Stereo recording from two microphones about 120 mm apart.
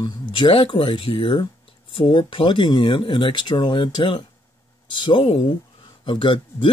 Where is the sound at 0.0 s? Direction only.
40° left (ahead or behind).